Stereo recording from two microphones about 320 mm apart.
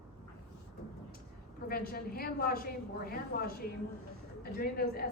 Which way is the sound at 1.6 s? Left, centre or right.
Left.